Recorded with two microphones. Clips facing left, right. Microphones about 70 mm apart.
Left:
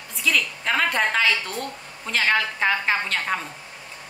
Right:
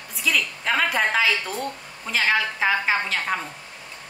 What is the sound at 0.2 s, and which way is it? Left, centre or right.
A woman's voice, centre.